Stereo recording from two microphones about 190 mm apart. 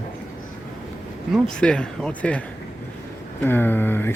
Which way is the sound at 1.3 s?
5° left (ahead or behind).